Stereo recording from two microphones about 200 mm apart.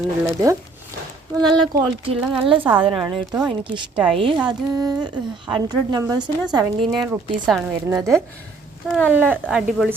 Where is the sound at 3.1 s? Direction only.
5° right (ahead or behind).